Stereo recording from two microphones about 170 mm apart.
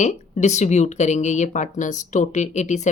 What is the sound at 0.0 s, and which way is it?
A woman's voice, 45° left (ahead or behind).